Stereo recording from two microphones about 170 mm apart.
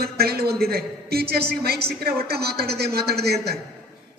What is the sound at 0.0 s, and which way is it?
A man's voice, 70° right (ahead or behind).